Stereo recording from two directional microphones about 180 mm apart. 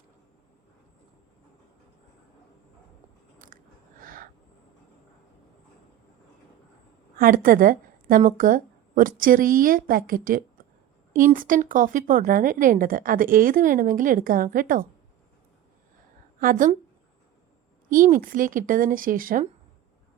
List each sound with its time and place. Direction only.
3.4 s chewing: 50° right (ahead or behind)
7.2 s a woman's voice: 50° right (ahead or behind)
16.4 s a woman's voice: 50° right (ahead or behind)
17.8 s a woman's voice: 50° right (ahead or behind)